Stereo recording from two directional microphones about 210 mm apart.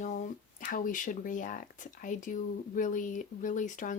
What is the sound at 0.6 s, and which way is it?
Speech, 40° left (ahead or behind).